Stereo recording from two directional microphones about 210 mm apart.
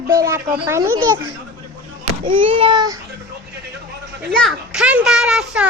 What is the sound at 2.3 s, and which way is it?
Speech, 25° right (ahead or behind).